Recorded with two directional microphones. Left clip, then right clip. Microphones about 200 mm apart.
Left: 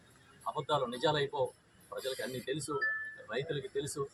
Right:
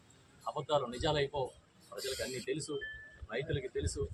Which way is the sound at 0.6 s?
Centre (ahead or behind).